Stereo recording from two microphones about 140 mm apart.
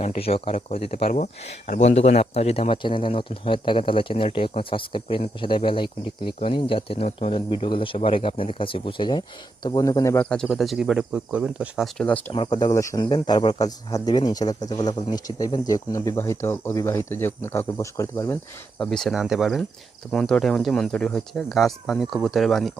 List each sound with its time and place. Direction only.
0.0 s speech: 50° left (ahead or behind); by 10.2 s 20° left (ahead or behind)
10.2 s speech: 5° left (ahead or behind)
11.9 s speech: 10° left (ahead or behind)
12.3 s speech: 35° left (ahead or behind); by 18.3 s 20° left (ahead or behind)
18.8 s speech: centre (ahead or behind)